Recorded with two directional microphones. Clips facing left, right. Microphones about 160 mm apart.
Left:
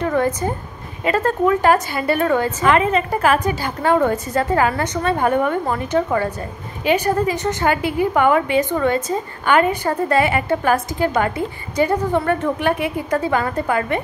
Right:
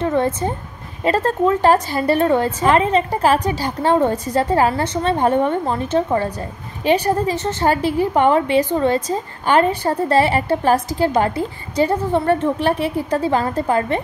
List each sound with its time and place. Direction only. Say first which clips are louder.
0.0 s a woman's voice: right 1 dB; 25° right (ahead or behind)